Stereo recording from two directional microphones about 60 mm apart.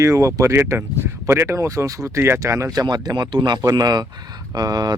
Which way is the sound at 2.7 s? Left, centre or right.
Right.